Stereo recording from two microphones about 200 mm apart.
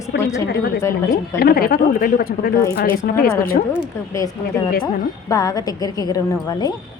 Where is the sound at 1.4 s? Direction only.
50° left (ahead or behind).